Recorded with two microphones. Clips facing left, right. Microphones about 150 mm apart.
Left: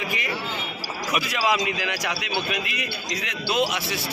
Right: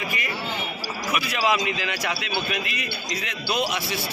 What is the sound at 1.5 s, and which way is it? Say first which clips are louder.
A man's voice: right 1 dB; 10° left (ahead or behind).